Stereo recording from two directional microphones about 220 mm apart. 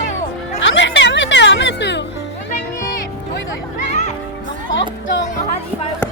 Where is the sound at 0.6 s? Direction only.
55° left (ahead or behind).